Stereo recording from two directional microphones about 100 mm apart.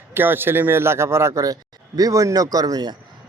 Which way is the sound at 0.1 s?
20° right (ahead or behind).